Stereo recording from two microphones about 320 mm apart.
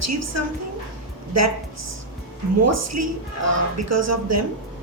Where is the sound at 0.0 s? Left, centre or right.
Right.